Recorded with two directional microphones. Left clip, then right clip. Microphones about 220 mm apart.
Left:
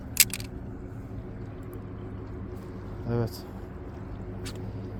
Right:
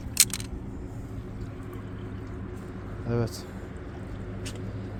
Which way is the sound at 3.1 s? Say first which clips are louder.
Right 1 dB; centre (ahead or behind).